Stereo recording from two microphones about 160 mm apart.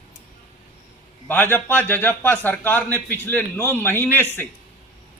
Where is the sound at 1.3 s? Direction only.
10° left (ahead or behind).